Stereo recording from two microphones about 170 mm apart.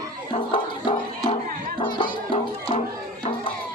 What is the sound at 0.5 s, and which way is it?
Music, 30° left (ahead or behind).